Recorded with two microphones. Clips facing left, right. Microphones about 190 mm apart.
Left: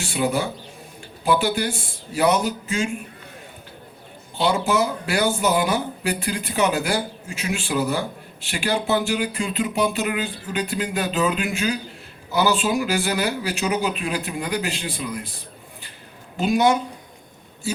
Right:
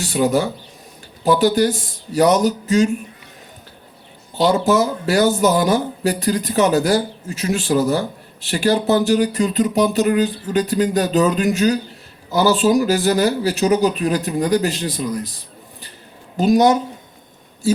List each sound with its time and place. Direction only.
0.0 s speech: 40° right (ahead or behind)
4.4 s speech: 40° right (ahead or behind)
16.4 s speech: 40° right (ahead or behind)